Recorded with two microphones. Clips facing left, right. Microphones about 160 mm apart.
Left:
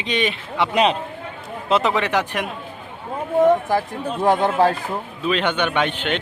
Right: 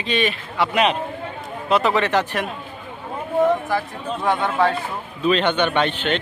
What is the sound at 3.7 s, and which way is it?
Speech, 40° left (ahead or behind).